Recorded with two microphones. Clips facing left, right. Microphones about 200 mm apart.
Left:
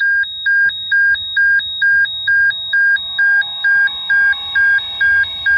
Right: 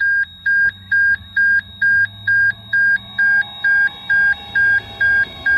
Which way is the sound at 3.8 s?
25° right (ahead or behind).